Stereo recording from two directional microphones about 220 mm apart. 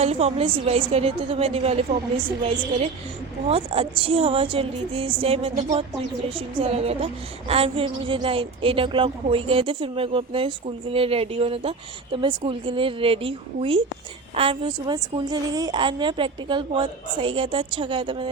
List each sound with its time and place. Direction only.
0.0 s a woman's voice: 30° right (ahead or behind)
3.4 s a woman's voice: 25° right (ahead or behind)